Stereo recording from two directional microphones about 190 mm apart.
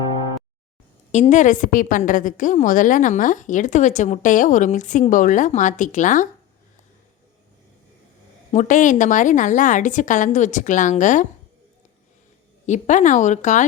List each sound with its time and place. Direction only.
1.1 s a woman's voice: 40° left (ahead or behind)
8.5 s a woman's voice: 40° left (ahead or behind)
12.6 s a woman's voice: 40° left (ahead or behind)